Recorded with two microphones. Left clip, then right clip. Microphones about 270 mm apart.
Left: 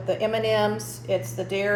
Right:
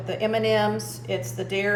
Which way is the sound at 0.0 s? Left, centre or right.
Centre.